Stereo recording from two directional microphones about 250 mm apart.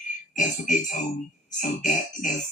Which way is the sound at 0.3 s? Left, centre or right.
Left.